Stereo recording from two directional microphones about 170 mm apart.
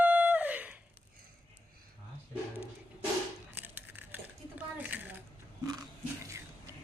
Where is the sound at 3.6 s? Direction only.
10° right (ahead or behind).